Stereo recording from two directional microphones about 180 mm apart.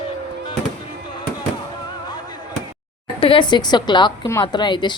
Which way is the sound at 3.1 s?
30° left (ahead or behind).